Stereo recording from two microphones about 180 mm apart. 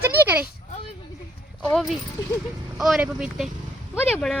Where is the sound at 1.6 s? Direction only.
Centre (ahead or behind).